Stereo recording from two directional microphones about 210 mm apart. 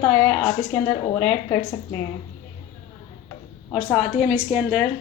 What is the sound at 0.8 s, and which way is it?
Speech, 25° left (ahead or behind).